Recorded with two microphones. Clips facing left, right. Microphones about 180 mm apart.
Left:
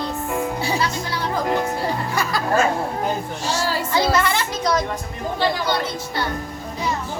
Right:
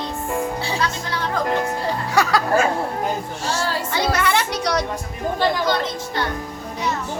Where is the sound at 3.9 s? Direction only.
65° right (ahead or behind).